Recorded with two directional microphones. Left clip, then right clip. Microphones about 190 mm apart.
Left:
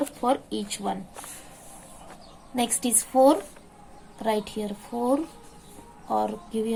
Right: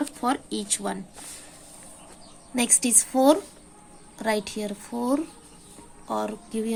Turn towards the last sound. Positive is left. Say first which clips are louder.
# left 2 dB
turn(degrees=-35)  # may be behind; listen again after turning